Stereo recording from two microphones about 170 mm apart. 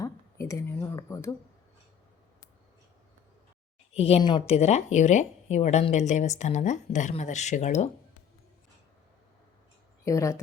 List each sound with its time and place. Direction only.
0.0 s speech: 20° left (ahead or behind)
3.9 s speech: 35° left (ahead or behind)
10.0 s speech: 20° left (ahead or behind)